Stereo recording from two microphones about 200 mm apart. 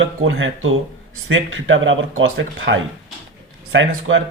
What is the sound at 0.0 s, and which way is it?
Speech, 80° right.